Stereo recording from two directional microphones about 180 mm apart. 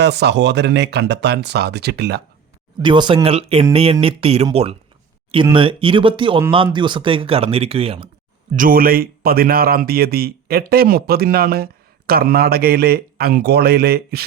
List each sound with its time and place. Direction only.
0.0 s speech: 65° right (ahead or behind)
2.8 s speech: 25° right (ahead or behind)
5.5 s speech: 30° right (ahead or behind)
8.5 s speech: 50° right (ahead or behind)